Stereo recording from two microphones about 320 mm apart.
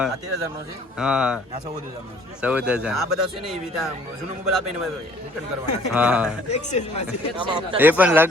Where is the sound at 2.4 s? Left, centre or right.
Centre.